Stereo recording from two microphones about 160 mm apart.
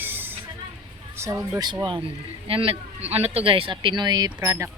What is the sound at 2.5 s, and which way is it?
Speech, 35° right (ahead or behind).